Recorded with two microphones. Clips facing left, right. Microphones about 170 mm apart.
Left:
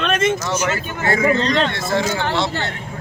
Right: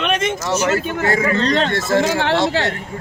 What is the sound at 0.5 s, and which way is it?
Speech, 40° right (ahead or behind).